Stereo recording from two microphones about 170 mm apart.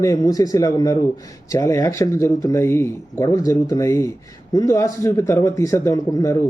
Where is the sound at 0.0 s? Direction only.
20° left (ahead or behind).